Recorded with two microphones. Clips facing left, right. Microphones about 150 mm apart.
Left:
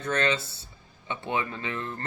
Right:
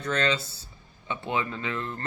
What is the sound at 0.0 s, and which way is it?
A man's voice, 25° left (ahead or behind).